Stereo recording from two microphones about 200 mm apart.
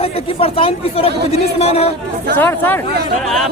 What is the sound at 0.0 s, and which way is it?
Speech, 30° left (ahead or behind).